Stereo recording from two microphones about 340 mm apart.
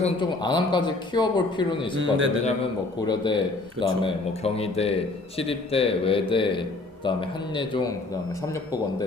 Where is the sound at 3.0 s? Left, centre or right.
Centre.